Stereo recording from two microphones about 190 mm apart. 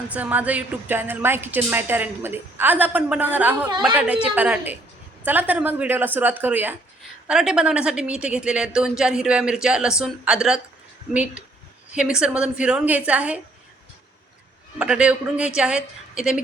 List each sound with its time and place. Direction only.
0.1 s a woman's voice: 10° right (ahead or behind)
3.7 s a woman's voice: 25° right (ahead or behind)
3.9 s a woman's voice: 5° right (ahead or behind)
14.8 s speech: 5° right (ahead or behind)